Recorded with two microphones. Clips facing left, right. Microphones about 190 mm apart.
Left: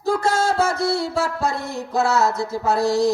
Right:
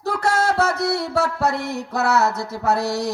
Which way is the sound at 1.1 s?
65° right (ahead or behind).